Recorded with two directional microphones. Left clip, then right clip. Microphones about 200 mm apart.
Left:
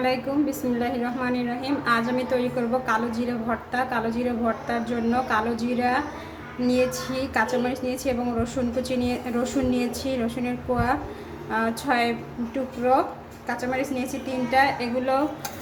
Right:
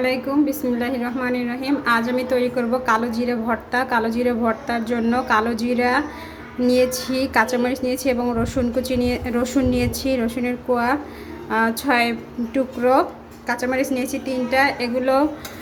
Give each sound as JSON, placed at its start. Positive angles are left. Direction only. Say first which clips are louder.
{"t": 0.0, "sound": "a woman's voice", "louder": "right 4 dB", "side_deg": -25}